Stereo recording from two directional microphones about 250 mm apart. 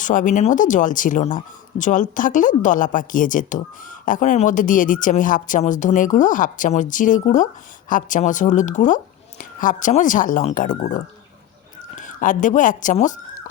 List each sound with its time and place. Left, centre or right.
0.0 s a woman's voice: left